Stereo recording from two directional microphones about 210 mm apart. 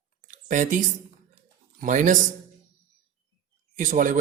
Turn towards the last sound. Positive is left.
turn(degrees=-40)  # may be behind; listen again after turning